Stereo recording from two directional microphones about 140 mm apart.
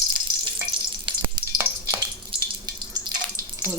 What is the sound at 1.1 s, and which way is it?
Frying, 35° right (ahead or behind).